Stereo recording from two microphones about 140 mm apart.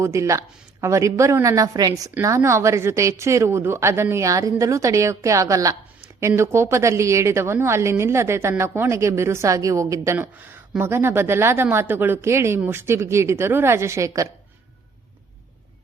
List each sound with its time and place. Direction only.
0.0 s a woman's voice: 20° right (ahead or behind)